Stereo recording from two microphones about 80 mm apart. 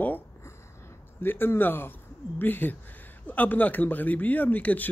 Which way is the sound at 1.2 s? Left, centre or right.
Left.